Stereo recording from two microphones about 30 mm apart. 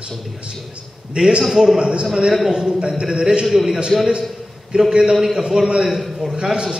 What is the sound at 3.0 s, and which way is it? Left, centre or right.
Speech, right.